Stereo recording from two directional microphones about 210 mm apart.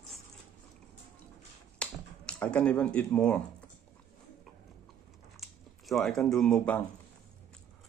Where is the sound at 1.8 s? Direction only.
5° left (ahead or behind).